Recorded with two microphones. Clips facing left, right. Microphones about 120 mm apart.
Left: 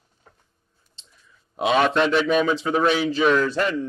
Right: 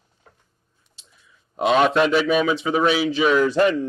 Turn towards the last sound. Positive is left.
turn(degrees=-15)  # may be behind; listen again after turning